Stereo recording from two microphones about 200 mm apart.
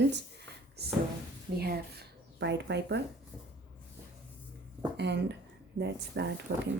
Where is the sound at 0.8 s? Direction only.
55° right (ahead or behind).